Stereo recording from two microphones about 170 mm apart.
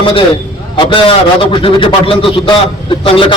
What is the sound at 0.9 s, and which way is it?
A man's voice, 30° left (ahead or behind).